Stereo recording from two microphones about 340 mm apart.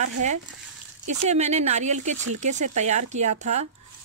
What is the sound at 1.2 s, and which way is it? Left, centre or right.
Speech, centre.